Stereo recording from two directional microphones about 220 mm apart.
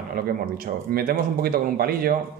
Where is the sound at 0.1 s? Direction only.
45° right (ahead or behind).